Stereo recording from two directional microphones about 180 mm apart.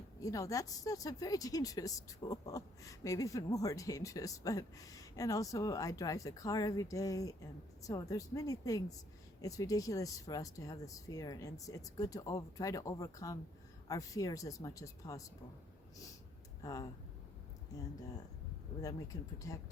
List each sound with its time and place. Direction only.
0.2 s a woman's voice: 20° left (ahead or behind)
16.6 s a woman's voice: 20° left (ahead or behind)
18.8 s a woman's voice: 20° left (ahead or behind)